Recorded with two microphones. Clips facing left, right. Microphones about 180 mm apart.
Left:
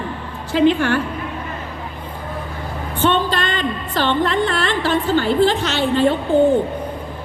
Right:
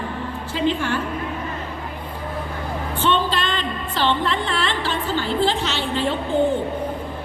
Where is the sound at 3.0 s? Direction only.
50° left (ahead or behind).